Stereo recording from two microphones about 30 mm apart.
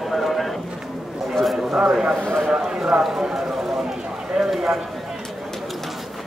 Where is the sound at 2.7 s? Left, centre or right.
Right.